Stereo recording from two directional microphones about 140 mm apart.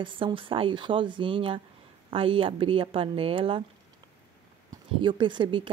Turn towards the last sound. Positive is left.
turn(degrees=-35)  # may be behind; listen again after turning